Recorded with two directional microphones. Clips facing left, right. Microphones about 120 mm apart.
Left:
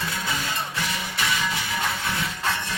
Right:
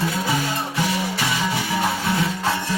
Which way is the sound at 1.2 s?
15° right (ahead or behind).